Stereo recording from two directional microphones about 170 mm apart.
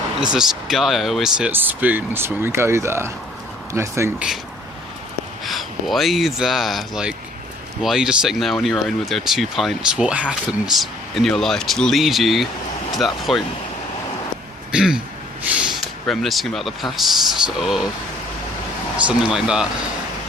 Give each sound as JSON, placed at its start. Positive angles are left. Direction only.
{"t": 0.2, "sound": "speech", "side_deg": -5}
{"t": 5.5, "sound": "speech", "side_deg": 0}
{"t": 14.7, "sound": "speech", "side_deg": -5}
{"t": 19.0, "sound": "speech", "side_deg": -5}